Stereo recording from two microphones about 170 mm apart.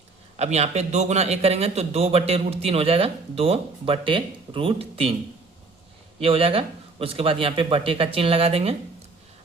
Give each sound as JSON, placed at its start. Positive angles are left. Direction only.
{"t": 0.3, "sound": "a man's voice", "side_deg": -40}
{"t": 6.1, "sound": "a man's voice", "side_deg": -35}